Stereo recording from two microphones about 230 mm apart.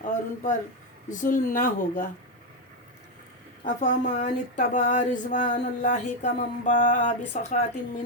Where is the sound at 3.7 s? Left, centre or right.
Left.